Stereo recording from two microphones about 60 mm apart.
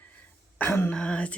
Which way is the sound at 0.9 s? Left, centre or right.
Centre.